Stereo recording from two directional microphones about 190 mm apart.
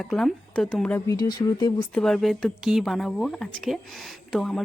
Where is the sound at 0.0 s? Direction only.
Centre (ahead or behind); by 2.0 s 20° left (ahead or behind).